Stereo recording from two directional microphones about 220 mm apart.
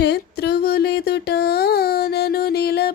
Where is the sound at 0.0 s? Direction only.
50° left (ahead or behind).